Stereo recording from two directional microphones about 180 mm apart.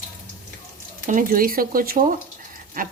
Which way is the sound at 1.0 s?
50° right (ahead or behind).